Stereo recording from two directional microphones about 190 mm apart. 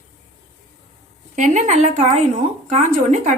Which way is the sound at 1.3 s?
40° right (ahead or behind).